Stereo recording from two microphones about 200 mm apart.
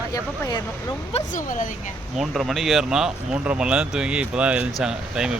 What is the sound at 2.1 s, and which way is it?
Speech, centre (ahead or behind).